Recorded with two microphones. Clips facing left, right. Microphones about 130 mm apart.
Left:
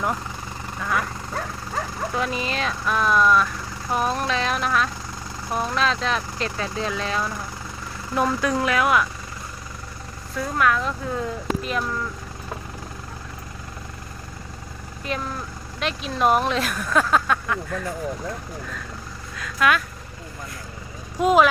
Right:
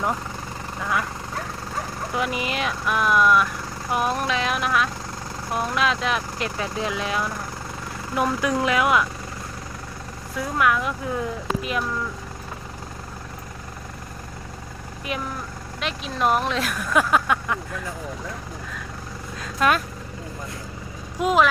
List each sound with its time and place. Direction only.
0.8 s speech: 15° right (ahead or behind)
2.1 s speech: 15° right (ahead or behind)
10.3 s speech: 15° right (ahead or behind)
15.1 s speech: 10° right (ahead or behind)
16.9 s speech: 10° right (ahead or behind)
19.4 s vehicle: 35° right (ahead or behind)
21.2 s speech: centre (ahead or behind)